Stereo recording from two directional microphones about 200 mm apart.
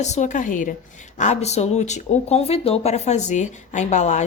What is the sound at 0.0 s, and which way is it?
Speech, 35° left (ahead or behind).